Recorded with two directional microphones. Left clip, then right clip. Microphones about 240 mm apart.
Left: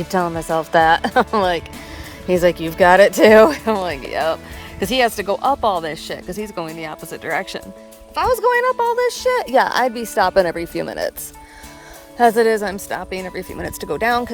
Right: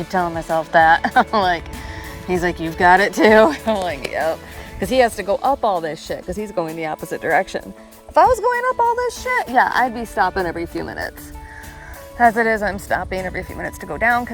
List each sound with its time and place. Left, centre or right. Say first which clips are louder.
0.1 s speech: even; left; by 7.6 s centre
8.1 s speech: right 2 dB; centre
8.8 s speech: even; centre
9.2 s speech: right 1 dB; left
12.1 s speech: left 1 dB; left